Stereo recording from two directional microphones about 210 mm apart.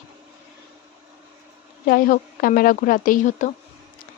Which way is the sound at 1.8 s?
45° left (ahead or behind).